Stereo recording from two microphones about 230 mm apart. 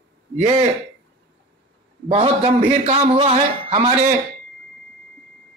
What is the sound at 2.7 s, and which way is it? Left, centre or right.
Speech, right.